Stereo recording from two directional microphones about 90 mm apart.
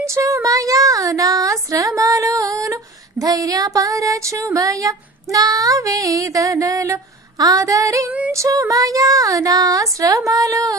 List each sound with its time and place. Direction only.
0.0 s speech: 35° right (ahead or behind)